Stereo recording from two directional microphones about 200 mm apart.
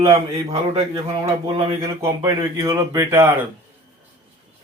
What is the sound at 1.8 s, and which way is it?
Speech, 15° right (ahead or behind).